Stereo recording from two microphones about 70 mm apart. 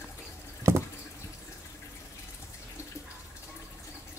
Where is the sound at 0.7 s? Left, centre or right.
Right.